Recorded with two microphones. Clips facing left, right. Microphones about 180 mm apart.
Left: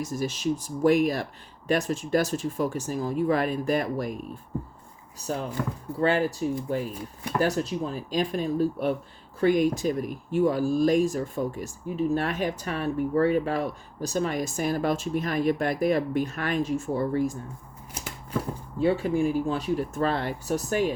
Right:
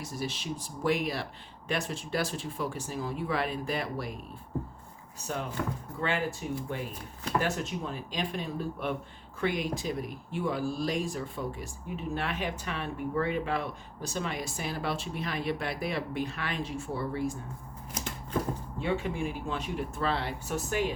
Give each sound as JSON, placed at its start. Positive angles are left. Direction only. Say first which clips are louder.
{"t": 0.0, "sound": "speech", "louder": "left 8 dB", "side_deg": 45}
{"t": 5.2, "sound": "speech", "louder": "left 4 dB", "side_deg": 35}
{"t": 17.9, "sound": "a sound", "louder": "right 1 dB", "side_deg": 10}
{"t": 18.8, "sound": "speech", "louder": "left 9 dB", "side_deg": 35}